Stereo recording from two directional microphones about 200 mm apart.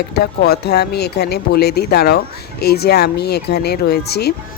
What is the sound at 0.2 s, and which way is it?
Speech, 55° left (ahead or behind).